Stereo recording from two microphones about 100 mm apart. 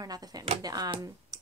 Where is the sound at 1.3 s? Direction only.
35° right (ahead or behind).